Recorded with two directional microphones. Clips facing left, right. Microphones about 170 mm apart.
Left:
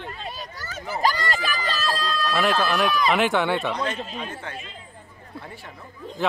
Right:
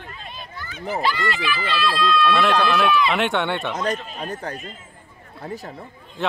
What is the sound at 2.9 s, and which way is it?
Speech, 40° left (ahead or behind).